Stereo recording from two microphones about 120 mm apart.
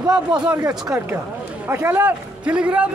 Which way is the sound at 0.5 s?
30° right (ahead or behind).